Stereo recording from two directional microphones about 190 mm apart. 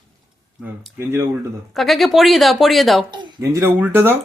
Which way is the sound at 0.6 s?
10° right (ahead or behind).